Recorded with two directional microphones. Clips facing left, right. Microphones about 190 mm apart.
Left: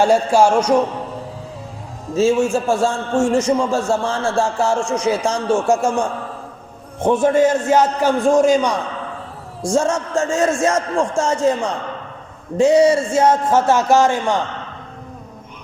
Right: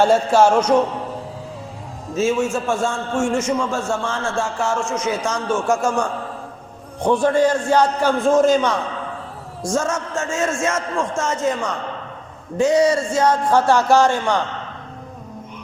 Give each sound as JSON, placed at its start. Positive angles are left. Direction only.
{"t": 0.0, "sound": "a man's voice", "side_deg": 10}
{"t": 2.1, "sound": "a man's voice", "side_deg": 30}
{"t": 9.6, "sound": "a man's voice", "side_deg": 30}